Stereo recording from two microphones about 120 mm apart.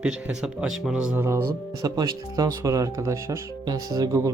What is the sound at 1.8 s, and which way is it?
Speech, 30° right (ahead or behind).